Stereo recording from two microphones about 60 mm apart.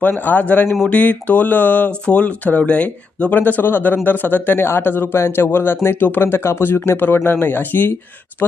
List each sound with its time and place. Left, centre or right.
0.0 s speech: left